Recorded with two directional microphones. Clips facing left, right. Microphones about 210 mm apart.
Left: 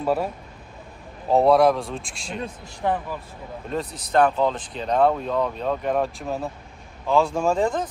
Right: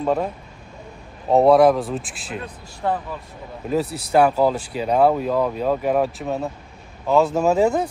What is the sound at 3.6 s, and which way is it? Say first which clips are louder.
Speech: right 7 dB; 5° right (ahead or behind).